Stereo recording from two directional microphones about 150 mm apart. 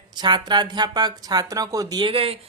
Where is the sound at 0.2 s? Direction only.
30° right (ahead or behind).